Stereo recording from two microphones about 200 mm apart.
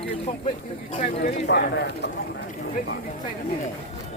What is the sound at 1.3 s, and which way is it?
Speech, 60° left (ahead or behind).